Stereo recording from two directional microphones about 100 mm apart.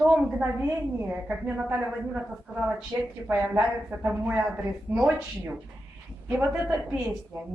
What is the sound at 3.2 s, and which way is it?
A woman's voice, 15° right (ahead or behind).